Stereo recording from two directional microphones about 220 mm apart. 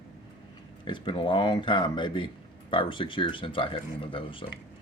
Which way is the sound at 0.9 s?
20° left (ahead or behind).